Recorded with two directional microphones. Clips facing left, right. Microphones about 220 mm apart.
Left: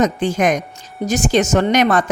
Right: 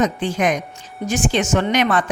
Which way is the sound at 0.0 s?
45° left (ahead or behind).